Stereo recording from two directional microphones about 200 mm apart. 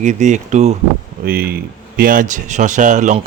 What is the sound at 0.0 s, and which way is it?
Speech, 35° right (ahead or behind).